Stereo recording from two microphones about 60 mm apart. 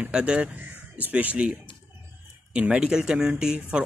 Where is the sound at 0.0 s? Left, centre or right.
Centre.